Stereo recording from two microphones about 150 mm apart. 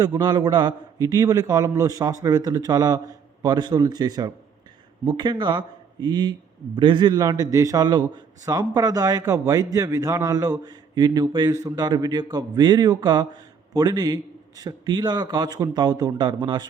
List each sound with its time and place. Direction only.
0.0 s a man's voice: 25° right (ahead or behind)